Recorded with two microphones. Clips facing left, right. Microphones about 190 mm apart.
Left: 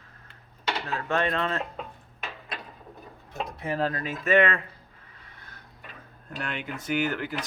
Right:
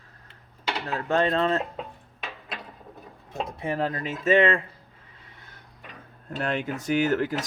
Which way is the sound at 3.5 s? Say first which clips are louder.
Even; 25° right (ahead or behind).